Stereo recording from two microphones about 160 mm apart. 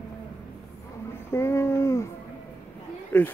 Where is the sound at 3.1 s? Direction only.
10° left (ahead or behind).